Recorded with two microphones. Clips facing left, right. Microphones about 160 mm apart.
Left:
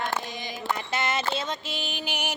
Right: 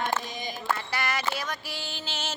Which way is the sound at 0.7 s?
20° left (ahead or behind).